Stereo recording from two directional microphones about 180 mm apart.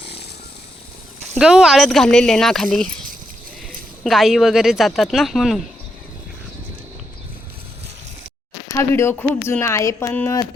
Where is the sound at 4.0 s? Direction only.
Centre (ahead or behind).